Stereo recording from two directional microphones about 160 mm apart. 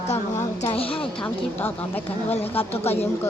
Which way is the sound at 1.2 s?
10° left (ahead or behind).